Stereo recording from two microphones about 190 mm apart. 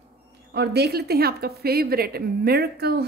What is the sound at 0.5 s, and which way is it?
A woman's voice, 60° right (ahead or behind).